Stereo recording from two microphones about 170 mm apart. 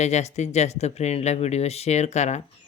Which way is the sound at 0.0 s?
40° left (ahead or behind).